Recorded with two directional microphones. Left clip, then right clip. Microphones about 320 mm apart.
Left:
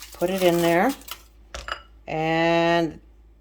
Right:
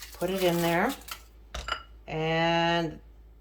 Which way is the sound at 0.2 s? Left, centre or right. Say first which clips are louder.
Left 6 dB; left.